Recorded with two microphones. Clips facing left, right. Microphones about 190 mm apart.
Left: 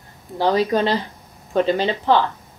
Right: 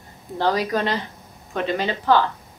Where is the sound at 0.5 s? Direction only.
30° left (ahead or behind).